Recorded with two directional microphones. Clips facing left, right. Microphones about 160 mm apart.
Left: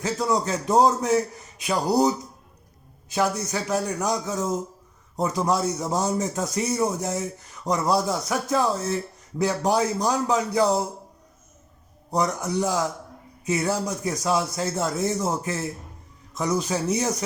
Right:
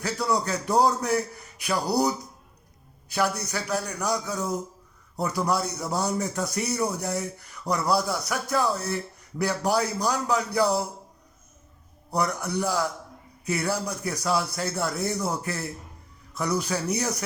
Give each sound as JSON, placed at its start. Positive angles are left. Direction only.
{"t": 0.0, "sound": "a man's voice", "side_deg": 20}
{"t": 12.1, "sound": "a man's voice", "side_deg": 20}